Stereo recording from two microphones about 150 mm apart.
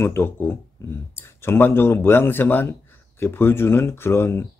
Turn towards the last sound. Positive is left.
turn(degrees=15)  # may be behind; listen again after turning